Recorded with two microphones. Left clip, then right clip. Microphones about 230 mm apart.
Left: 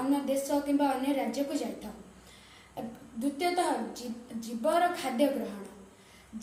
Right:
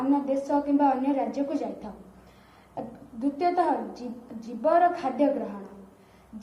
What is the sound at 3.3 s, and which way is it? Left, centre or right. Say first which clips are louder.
A woman's voice: right 5 dB; left.